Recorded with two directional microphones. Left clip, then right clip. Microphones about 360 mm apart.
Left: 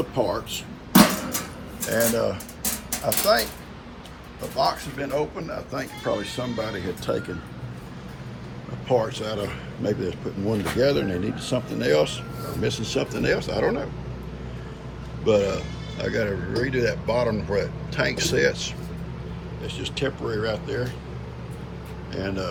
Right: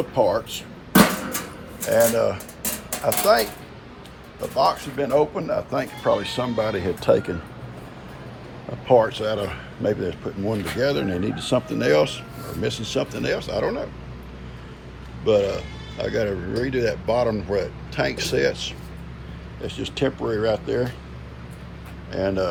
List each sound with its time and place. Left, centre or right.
0.1 s speech: centre
1.9 s speech: centre
4.5 s speech: centre
8.9 s speech: centre
15.2 s speech: centre
22.1 s speech: centre